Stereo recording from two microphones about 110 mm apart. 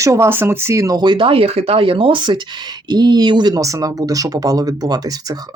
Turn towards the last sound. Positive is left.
turn(degrees=-35)  # may be behind; listen again after turning